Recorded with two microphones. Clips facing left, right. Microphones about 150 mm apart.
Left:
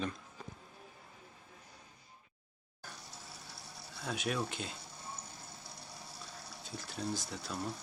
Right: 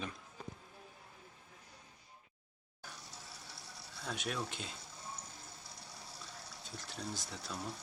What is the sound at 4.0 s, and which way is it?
Speech, centre (ahead or behind).